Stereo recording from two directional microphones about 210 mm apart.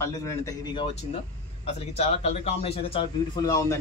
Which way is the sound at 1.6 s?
30° left (ahead or behind).